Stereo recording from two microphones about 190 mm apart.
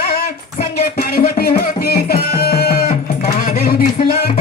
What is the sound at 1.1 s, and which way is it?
Music, 55° left (ahead or behind).